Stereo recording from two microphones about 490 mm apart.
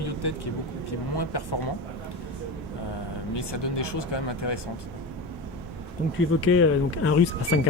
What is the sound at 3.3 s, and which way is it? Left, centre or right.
Speech, left.